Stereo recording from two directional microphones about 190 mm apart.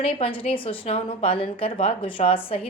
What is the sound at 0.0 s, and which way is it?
A woman's voice, 30° left (ahead or behind).